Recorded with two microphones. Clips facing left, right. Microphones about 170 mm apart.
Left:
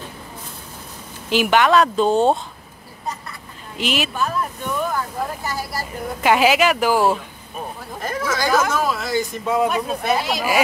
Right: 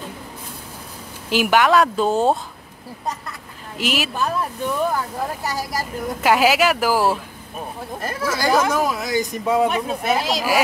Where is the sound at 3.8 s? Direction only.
5° right (ahead or behind).